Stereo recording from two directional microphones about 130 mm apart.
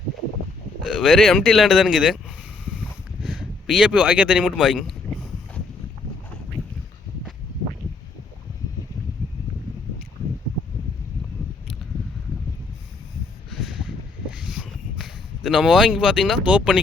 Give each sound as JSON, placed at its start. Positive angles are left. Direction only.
{"t": 0.9, "sound": "speech", "side_deg": -5}
{"t": 3.2, "sound": "speech", "side_deg": -5}
{"t": 13.5, "sound": "a sound", "side_deg": 0}
{"t": 16.5, "sound": "speech", "side_deg": -10}